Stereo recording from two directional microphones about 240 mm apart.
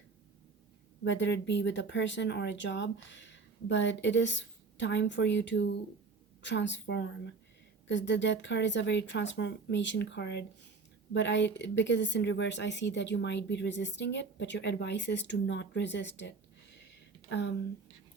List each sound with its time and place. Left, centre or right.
1.0 s a woman's voice: left